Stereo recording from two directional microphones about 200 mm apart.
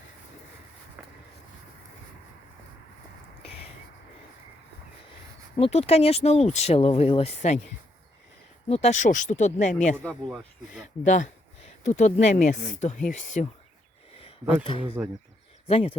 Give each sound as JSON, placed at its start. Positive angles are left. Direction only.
{"t": 3.4, "sound": "a sound", "side_deg": 30}
{"t": 5.5, "sound": "speech", "side_deg": 30}
{"t": 8.7, "sound": "speech", "side_deg": 35}
{"t": 10.0, "sound": "speech", "side_deg": 5}
{"t": 11.0, "sound": "speech", "side_deg": 35}
{"t": 14.6, "sound": "speech", "side_deg": 25}